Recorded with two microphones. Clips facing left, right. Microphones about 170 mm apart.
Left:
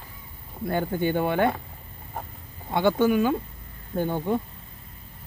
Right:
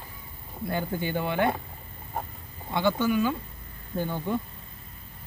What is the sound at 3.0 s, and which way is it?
Speech, 50° left (ahead or behind).